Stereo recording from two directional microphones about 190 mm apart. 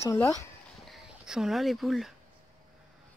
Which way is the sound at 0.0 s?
15° left (ahead or behind).